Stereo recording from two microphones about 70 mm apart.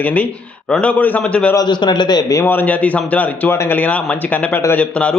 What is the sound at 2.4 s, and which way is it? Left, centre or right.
A man's voice, left.